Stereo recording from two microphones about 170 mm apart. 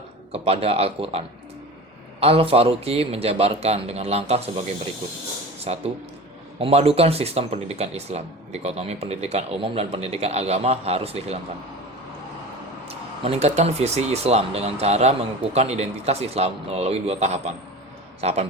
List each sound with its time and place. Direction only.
0.4 s speech: 35° right (ahead or behind)
2.2 s speech: 35° right (ahead or behind)
5.6 s speech: 35° right (ahead or behind)
13.2 s speech: 35° right (ahead or behind)